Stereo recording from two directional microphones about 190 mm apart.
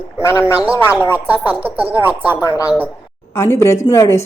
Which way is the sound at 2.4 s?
20° left (ahead or behind).